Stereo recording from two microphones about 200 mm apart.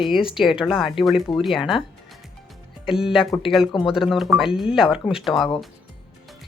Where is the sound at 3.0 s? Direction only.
5° right (ahead or behind).